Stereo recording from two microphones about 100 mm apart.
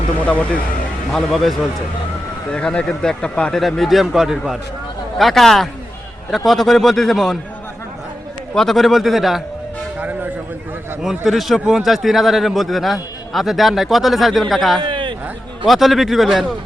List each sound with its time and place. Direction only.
0.3 s speech: 15° left (ahead or behind)
1.1 s a man's voice: centre (ahead or behind)
8.5 s a man's voice: centre (ahead or behind)
11.0 s a man's voice: centre (ahead or behind)
14.8 s a sound: 55° right (ahead or behind)
15.6 s a man's voice: centre (ahead or behind)